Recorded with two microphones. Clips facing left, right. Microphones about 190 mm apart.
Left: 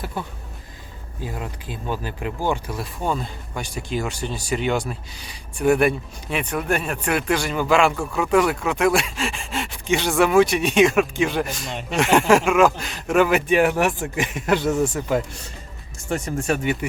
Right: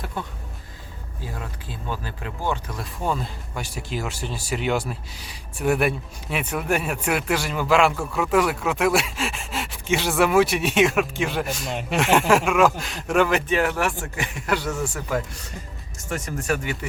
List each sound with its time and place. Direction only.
0.0 s speech: 5° left (ahead or behind)
1.3 s speech: 15° left (ahead or behind)
3.0 s speech: centre (ahead or behind); by 16.7 s 25° left (ahead or behind)